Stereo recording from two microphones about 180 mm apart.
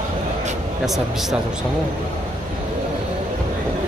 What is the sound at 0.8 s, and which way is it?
Speech, centre (ahead or behind).